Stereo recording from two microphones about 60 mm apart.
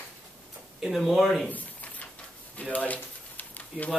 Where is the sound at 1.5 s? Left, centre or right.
Left.